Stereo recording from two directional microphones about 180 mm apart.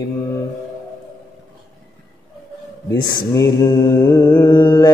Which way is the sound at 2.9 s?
20° left (ahead or behind).